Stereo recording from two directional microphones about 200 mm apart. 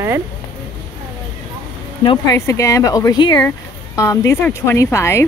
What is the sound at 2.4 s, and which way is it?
Speech, 15° left (ahead or behind).